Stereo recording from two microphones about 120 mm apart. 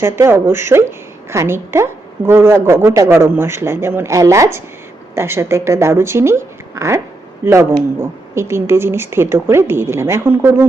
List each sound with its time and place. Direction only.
0.0 s a woman's voice: 20° right (ahead or behind)